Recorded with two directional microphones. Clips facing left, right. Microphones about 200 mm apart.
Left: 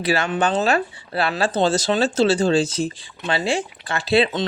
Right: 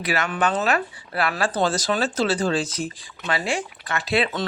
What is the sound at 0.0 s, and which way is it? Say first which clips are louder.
Speech: left 3 dB; 30° left (ahead or behind).